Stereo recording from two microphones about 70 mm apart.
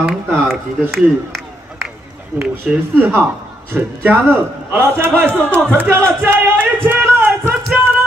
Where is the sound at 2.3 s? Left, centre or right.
Right.